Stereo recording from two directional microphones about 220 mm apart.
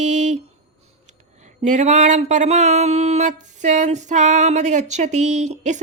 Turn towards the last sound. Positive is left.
turn(degrees=-35)  # may be behind; listen again after turning